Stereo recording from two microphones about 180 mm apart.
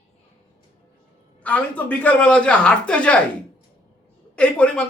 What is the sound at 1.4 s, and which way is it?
A man's voice, 10° left (ahead or behind).